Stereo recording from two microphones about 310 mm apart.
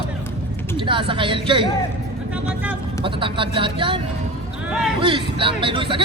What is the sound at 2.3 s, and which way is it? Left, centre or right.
Vehicle, centre.